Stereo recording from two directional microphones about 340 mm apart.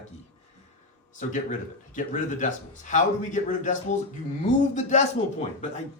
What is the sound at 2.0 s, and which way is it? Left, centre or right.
A man's voice, left.